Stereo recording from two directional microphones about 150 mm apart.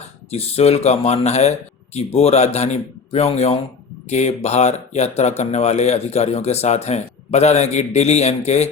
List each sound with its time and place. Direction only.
0.3 s speech: 45° left (ahead or behind)